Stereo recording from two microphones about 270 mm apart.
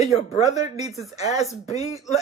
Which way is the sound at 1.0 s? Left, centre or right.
Centre.